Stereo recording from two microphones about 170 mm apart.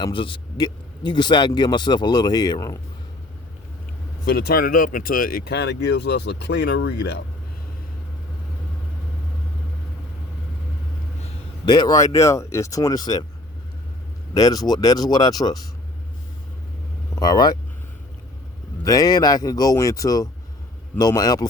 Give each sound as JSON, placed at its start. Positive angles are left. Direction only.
{"t": 0.0, "sound": "speech", "side_deg": 30}
{"t": 4.3, "sound": "speech", "side_deg": 65}
{"t": 11.6, "sound": "speech", "side_deg": 25}
{"t": 14.3, "sound": "speech", "side_deg": 20}
{"t": 17.2, "sound": "speech", "side_deg": 25}
{"t": 18.9, "sound": "speech", "side_deg": 20}